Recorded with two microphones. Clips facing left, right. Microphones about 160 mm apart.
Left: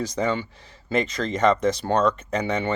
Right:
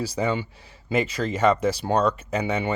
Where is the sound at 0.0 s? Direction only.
10° right (ahead or behind).